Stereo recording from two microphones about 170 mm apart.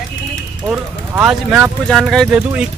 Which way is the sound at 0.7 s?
10° right (ahead or behind).